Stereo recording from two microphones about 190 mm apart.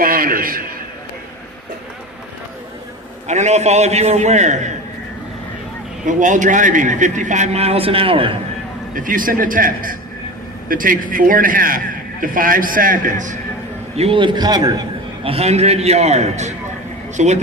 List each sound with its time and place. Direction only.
0.0 s a sound: 50° right (ahead or behind)
3.2 s a man's voice: 40° right (ahead or behind)
6.1 s a man's voice: 40° right (ahead or behind)
9.0 s a man's voice: 45° right (ahead or behind)
13.9 s a man's voice: 30° right (ahead or behind)
15.2 s a man's voice: 30° right (ahead or behind)